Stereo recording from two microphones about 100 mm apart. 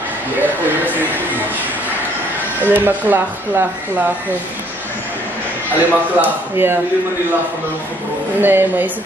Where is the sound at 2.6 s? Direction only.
20° right (ahead or behind).